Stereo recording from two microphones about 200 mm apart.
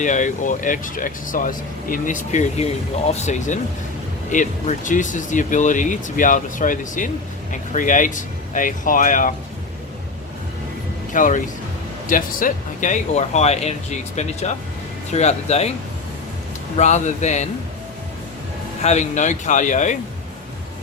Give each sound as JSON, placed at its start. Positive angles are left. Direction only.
{"t": 0.0, "sound": "speech", "side_deg": 40}
{"t": 11.1, "sound": "speech", "side_deg": 40}
{"t": 16.7, "sound": "speech", "side_deg": 35}
{"t": 18.8, "sound": "speech", "side_deg": 35}